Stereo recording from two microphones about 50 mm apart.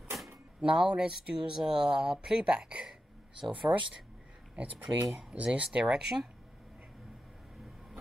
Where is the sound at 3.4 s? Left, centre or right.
Right.